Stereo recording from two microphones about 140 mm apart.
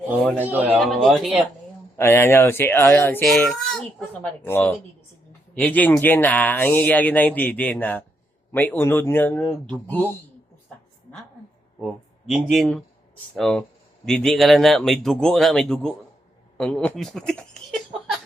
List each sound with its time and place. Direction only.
0.3 s a man's voice: 15° right (ahead or behind)
0.8 s speech: centre (ahead or behind)
2.0 s speech: 20° left (ahead or behind)
3.5 s a sound: 5° left (ahead or behind)
4.4 s speech: 15° left (ahead or behind)
11.8 s speech: 5° right (ahead or behind)